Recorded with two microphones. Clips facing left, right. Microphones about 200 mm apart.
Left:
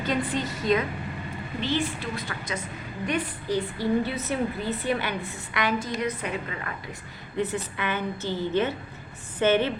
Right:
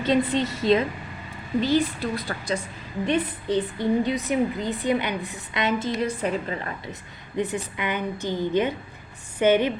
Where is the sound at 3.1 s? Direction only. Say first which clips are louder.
Right 4 dB; 25° right (ahead or behind).